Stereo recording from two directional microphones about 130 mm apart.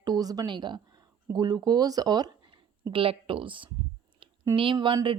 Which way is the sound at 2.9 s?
45° right (ahead or behind).